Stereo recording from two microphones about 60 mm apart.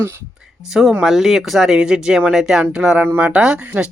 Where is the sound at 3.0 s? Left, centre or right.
Right.